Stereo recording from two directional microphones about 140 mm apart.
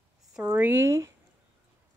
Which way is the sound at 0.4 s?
10° right (ahead or behind).